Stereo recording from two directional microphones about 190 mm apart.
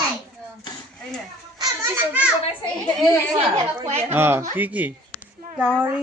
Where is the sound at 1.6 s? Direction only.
15° right (ahead or behind).